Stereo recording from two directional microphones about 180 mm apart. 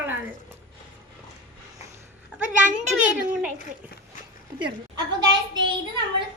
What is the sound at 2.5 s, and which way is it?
Speech, 45° right (ahead or behind).